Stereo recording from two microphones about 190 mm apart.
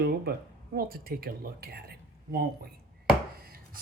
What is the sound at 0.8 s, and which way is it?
Speech, 50° right (ahead or behind).